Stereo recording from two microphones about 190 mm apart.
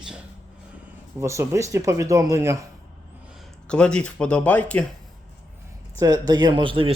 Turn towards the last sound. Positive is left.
turn(degrees=-25)  # may be behind; listen again after turning